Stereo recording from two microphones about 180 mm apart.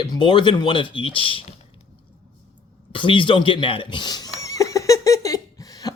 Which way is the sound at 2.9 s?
30° left (ahead or behind).